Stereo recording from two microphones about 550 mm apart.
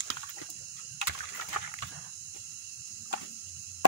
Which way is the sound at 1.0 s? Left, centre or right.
Left.